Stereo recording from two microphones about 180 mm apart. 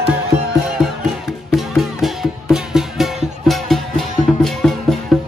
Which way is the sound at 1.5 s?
Centre (ahead or behind).